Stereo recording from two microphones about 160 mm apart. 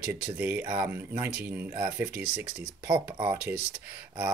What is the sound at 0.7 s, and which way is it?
Speech, 25° right (ahead or behind).